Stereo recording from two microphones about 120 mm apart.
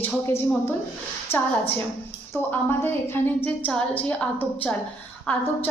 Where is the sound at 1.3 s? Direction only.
60° left (ahead or behind).